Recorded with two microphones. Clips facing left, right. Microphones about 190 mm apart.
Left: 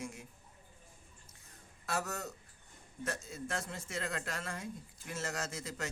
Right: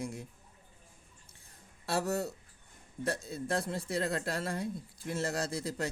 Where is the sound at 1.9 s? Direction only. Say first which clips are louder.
Right 6 dB; 35° right (ahead or behind).